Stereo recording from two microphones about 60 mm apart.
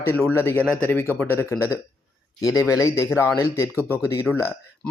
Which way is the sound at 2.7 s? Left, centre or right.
Left.